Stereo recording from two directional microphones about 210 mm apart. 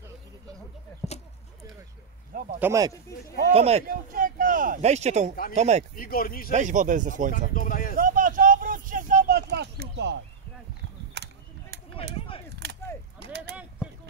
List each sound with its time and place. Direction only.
2.6 s speech: 15° right (ahead or behind)
3.3 s speech: 35° right (ahead or behind)
4.1 s speech: 40° right (ahead or behind)
5.9 s speech: 45° left (ahead or behind)
6.5 s speech: 35° right (ahead or behind)
7.5 s speech: 40° left (ahead or behind)
8.0 s a sound: 40° right (ahead or behind)
12.6 s a sound: 55° right (ahead or behind)